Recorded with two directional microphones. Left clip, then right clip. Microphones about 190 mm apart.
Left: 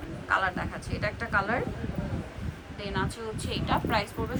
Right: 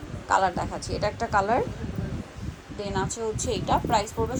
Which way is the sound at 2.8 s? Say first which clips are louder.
Right 4 dB; 25° right (ahead or behind).